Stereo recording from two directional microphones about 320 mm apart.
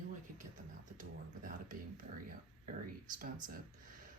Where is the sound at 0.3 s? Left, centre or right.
Right.